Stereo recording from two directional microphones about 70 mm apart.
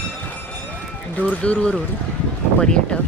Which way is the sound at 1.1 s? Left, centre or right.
Left.